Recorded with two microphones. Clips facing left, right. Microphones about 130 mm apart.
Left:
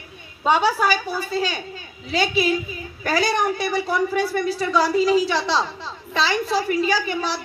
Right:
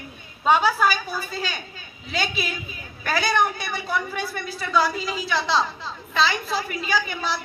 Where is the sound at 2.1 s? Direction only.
35° left (ahead or behind).